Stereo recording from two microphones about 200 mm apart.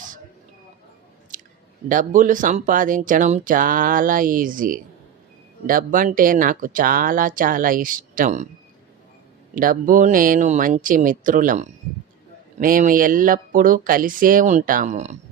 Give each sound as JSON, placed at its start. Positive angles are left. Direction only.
{"t": 1.3, "sound": "chewing", "side_deg": -40}
{"t": 1.9, "sound": "speech", "side_deg": -40}
{"t": 9.6, "sound": "speech", "side_deg": -40}